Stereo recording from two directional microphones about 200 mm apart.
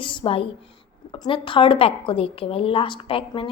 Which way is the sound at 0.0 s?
25° left (ahead or behind).